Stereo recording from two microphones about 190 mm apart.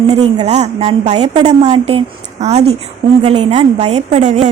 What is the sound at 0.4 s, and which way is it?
A woman's voice, 35° right (ahead or behind).